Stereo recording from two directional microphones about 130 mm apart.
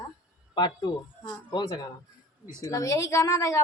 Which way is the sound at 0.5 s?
35° left (ahead or behind).